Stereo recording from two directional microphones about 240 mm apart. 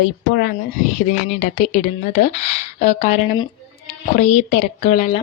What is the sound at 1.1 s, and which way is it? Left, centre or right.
A woman's voice, left.